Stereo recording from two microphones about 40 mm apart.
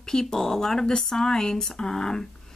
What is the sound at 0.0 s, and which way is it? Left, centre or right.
Speech, centre.